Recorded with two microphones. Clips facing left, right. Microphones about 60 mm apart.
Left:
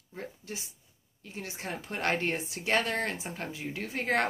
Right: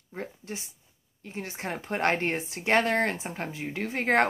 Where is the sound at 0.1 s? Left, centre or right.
Right.